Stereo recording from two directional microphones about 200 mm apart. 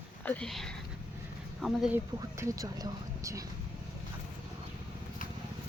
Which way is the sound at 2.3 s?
15° right (ahead or behind).